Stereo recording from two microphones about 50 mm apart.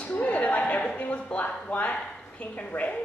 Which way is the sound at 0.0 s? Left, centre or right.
Left.